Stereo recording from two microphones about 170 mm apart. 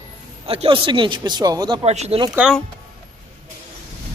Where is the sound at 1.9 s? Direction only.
40° right (ahead or behind).